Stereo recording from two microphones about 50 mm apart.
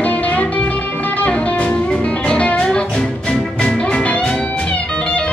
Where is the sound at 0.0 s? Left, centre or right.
Left.